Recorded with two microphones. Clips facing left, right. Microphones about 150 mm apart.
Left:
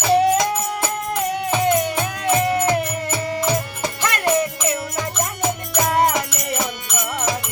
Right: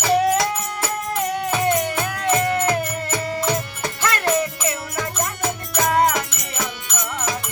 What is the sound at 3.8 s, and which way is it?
Music, 20° left (ahead or behind).